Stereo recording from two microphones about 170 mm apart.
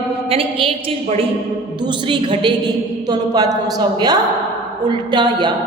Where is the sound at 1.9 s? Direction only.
30° right (ahead or behind).